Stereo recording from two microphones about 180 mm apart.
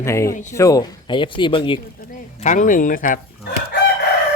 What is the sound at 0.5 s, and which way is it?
Speech, 20° left (ahead or behind).